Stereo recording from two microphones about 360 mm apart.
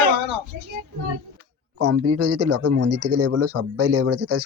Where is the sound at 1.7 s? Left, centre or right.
Right.